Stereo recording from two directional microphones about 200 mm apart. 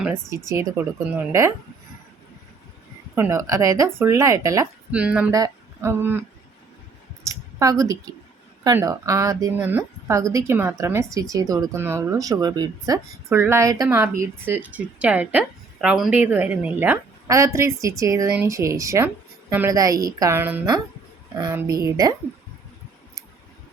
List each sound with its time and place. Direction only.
0.0 s a woman's voice: 10° right (ahead or behind)
3.2 s a woman's voice: 15° right (ahead or behind)
7.3 s a woman's voice: 15° right (ahead or behind)